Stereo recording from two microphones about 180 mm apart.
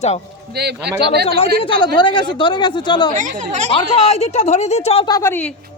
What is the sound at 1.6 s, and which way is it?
Speech, 30° left (ahead or behind).